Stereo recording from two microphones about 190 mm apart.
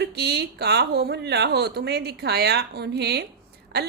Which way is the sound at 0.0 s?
60° right (ahead or behind).